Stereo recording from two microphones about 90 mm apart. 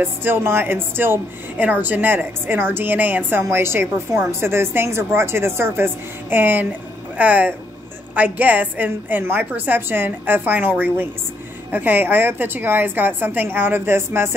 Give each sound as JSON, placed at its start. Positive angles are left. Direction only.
{"t": 0.0, "sound": "speech", "side_deg": -25}